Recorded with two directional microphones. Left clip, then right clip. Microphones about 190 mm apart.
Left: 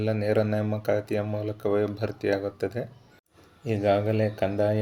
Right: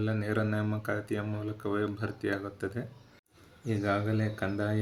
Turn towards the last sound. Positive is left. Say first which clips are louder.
# left 8 dB
turn(degrees=15)  # may be behind; listen again after turning